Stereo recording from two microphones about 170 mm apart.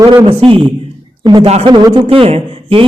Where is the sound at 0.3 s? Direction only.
30° right (ahead or behind).